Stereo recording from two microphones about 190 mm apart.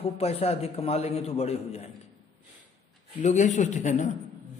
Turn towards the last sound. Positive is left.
turn(degrees=40)  # may be behind; listen again after turning